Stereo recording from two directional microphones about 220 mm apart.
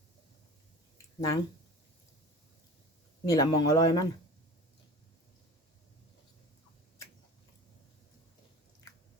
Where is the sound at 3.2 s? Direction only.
15° left (ahead or behind).